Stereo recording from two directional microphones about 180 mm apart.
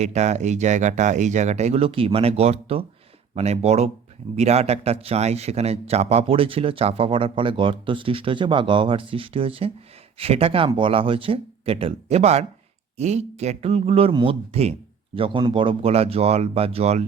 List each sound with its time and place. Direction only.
0.0 s speech: 40° right (ahead or behind)